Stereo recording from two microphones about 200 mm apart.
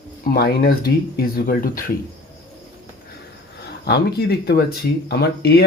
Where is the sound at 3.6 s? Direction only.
55° left (ahead or behind).